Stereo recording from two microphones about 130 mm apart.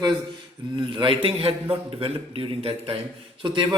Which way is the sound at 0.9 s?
40° right (ahead or behind).